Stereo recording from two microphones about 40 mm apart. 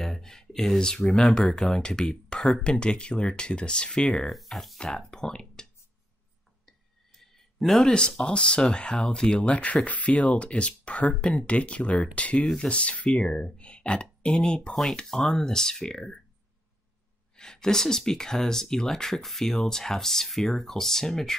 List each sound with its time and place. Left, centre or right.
0.0 s speech: centre
4.2 s speech: centre
4.8 s speech: centre
7.2 s a sound: centre
8.2 s speech: left
14.7 s speech: centre
17.4 s speech: centre